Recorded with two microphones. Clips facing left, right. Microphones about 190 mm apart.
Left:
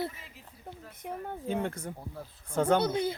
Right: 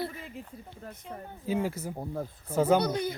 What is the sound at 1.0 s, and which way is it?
Speech, 60° left (ahead or behind).